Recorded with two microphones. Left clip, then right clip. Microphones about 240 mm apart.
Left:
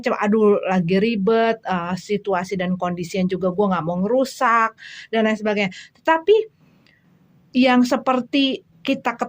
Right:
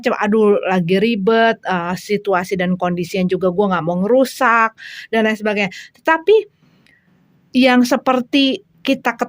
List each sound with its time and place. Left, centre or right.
0.0 s speech: right
7.5 s a woman's voice: right